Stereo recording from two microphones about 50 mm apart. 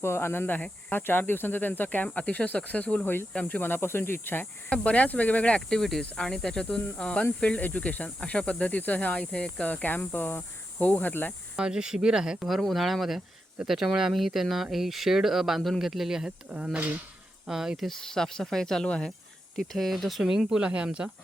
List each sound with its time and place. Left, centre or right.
0.0 s speech: left
4.7 s speech: left
5.6 s speech: centre; by 9.6 s left
9.6 s speech: left
11.5 s speech: centre
12.5 s speech: centre
16.7 s speech: right
17.4 s speech: centre
17.7 s speech: centre
19.5 s speech: centre
20.6 s speech: right